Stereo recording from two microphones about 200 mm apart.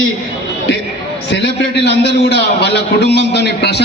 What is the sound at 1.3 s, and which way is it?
A man's voice, 60° left (ahead or behind).